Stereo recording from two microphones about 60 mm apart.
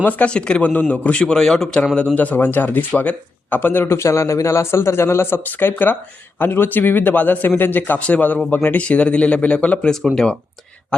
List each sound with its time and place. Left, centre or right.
0.0 s speech: left
0.7 s a man's voice: left
2.1 s a man's voice: left